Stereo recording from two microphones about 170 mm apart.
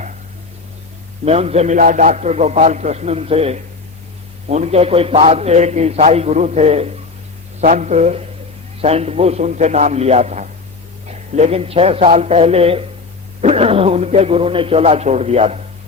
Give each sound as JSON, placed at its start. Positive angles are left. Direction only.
{"t": 1.2, "sound": "a man's voice", "side_deg": -40}